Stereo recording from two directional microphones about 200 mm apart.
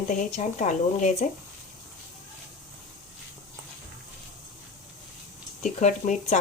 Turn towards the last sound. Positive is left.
turn(degrees=35)  # may be behind; listen again after turning